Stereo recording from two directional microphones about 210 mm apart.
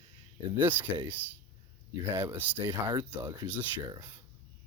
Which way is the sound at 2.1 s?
10° right (ahead or behind).